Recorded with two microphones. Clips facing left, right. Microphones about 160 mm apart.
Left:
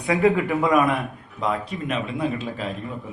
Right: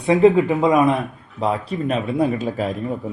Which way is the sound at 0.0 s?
25° right (ahead or behind).